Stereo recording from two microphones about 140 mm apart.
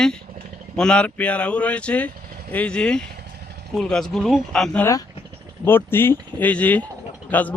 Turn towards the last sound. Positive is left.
turn(degrees=10)  # may be behind; listen again after turning